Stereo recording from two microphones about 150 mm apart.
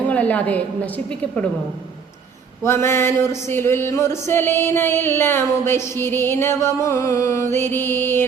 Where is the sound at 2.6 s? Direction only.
15° left (ahead or behind).